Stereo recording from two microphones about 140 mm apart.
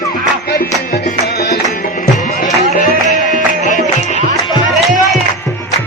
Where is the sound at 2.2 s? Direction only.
65° left (ahead or behind).